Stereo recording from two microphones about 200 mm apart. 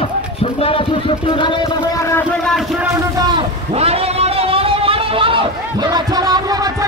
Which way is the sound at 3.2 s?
25° right (ahead or behind).